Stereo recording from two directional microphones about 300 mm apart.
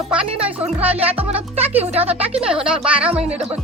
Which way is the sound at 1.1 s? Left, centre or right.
Centre.